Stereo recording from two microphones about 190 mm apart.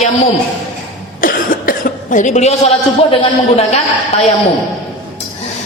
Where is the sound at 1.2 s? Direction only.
45° left (ahead or behind).